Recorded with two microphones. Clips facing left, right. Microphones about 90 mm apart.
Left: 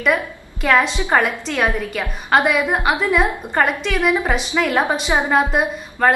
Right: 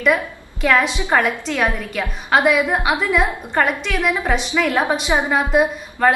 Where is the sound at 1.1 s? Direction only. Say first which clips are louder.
Left 1 dB; centre (ahead or behind).